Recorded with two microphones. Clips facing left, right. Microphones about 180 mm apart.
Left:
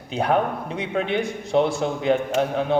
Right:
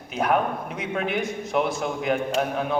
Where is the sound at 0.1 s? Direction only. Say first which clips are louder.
Left 2 dB; 30° left (ahead or behind).